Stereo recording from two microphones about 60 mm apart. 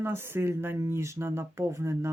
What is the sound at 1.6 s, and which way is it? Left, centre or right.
Speech, right.